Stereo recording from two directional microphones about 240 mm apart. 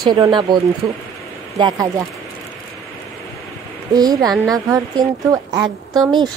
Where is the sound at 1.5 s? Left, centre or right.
Centre.